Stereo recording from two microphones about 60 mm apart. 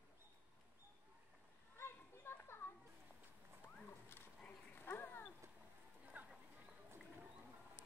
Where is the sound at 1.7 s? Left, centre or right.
Left.